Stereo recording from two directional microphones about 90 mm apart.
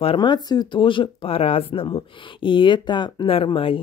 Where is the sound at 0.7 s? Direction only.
70° left (ahead or behind); by 1.8 s 90° left.